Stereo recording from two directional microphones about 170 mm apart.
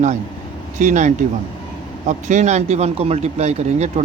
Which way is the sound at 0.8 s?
45° right (ahead or behind).